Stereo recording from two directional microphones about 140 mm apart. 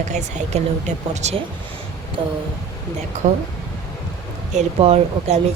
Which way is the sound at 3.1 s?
55° right (ahead or behind).